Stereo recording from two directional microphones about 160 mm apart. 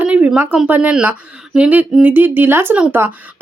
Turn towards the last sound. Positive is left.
turn(degrees=-10)  # may be behind; listen again after turning